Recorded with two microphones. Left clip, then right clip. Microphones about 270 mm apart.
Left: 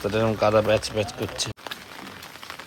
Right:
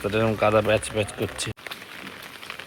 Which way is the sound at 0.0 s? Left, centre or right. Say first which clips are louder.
Even; centre.